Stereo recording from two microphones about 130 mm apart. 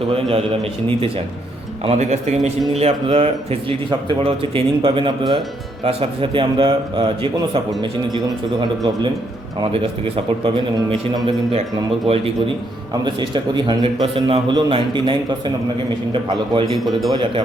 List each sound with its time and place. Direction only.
0.1 s a man's voice: 50° right (ahead or behind)
9.6 s a man's voice: 45° right (ahead or behind)
12.0 s a man's voice: 45° right (ahead or behind)
13.1 s a man's voice: 35° right (ahead or behind)
17.1 s a man's voice: 35° right (ahead or behind)